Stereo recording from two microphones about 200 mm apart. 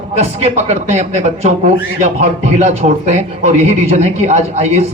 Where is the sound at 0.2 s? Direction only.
30° right (ahead or behind).